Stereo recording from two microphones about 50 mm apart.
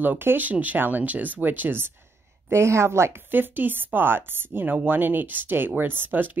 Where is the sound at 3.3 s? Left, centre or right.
Right.